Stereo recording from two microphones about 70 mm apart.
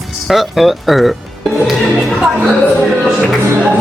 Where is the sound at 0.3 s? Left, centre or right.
Centre.